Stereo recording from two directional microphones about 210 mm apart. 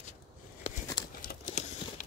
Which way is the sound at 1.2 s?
40° left (ahead or behind).